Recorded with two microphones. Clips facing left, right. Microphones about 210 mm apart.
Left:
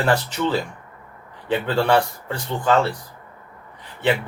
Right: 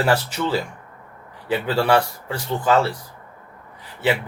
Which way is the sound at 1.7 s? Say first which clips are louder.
Even; 5° right (ahead or behind).